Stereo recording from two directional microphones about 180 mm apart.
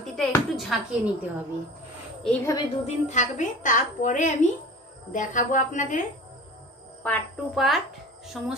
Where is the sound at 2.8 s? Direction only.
40° left (ahead or behind).